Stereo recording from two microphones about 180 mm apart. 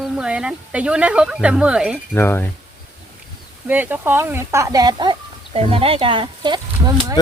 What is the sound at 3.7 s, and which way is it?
Speech, 10° right (ahead or behind).